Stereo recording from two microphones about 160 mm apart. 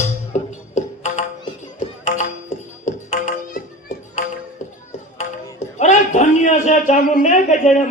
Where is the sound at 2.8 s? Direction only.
50° left (ahead or behind).